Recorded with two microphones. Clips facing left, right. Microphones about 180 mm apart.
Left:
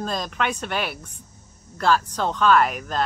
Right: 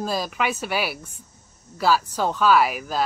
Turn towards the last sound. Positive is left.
turn(degrees=-5)  # may be behind; listen again after turning